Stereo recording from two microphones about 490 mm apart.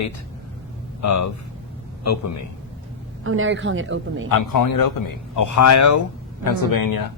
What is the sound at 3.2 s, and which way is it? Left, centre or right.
A woman's voice, right.